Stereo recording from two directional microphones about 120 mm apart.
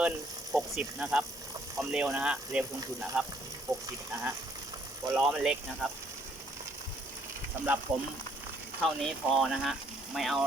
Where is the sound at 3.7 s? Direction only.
30° right (ahead or behind).